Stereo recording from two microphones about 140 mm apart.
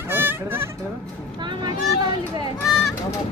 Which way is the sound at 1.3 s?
30° right (ahead or behind).